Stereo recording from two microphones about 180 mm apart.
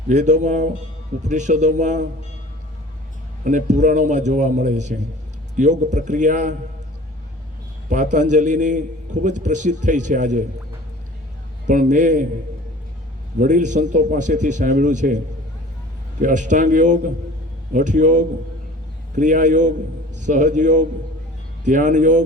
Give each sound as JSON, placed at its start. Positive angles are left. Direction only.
{"t": 0.1, "sound": "a man's voice", "side_deg": -40}
{"t": 3.4, "sound": "a man's voice", "side_deg": -45}
{"t": 7.9, "sound": "a man's voice", "side_deg": -45}
{"t": 11.7, "sound": "a man's voice", "side_deg": -45}
{"t": 13.4, "sound": "a man's voice", "side_deg": -45}
{"t": 16.2, "sound": "a man's voice", "side_deg": -45}